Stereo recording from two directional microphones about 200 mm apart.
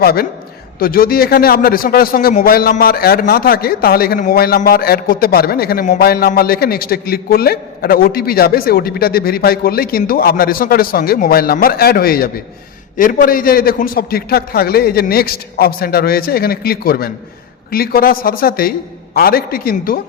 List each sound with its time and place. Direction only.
0.0 s a man's voice: 50° left (ahead or behind)